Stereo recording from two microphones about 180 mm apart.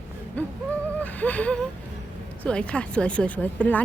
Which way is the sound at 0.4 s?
10° left (ahead or behind).